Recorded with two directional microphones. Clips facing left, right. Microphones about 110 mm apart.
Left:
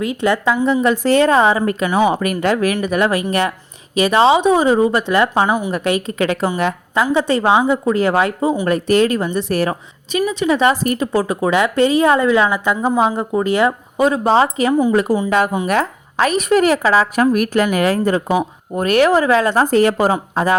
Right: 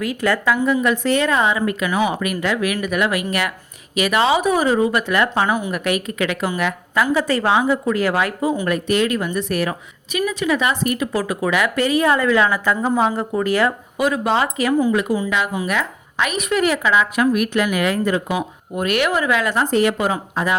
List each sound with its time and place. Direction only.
0.0 s a woman's voice: 25° left (ahead or behind)
14.9 s speech: 35° left (ahead or behind)